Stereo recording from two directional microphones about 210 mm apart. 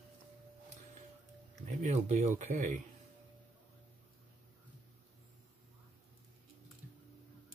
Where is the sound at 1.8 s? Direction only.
35° right (ahead or behind).